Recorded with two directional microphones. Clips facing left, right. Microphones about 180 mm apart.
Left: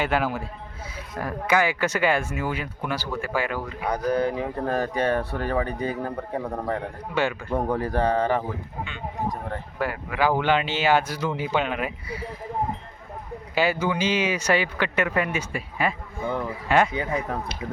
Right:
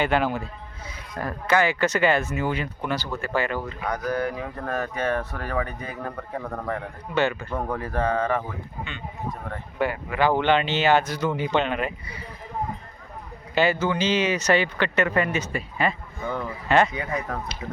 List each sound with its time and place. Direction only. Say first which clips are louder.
0.0 s speech: right 2 dB; 5° left (ahead or behind)
3.8 s speech: left 4 dB; 30° left (ahead or behind)
6.4 s speech: even; 10° left (ahead or behind)
7.7 s speech: left 2 dB; 35° left (ahead or behind)
9.7 s speech: right 3 dB; 5° left (ahead or behind)
13.6 s speech: right 1 dB; 10° left (ahead or behind)
16.9 s speech: left 2 dB; 30° left (ahead or behind)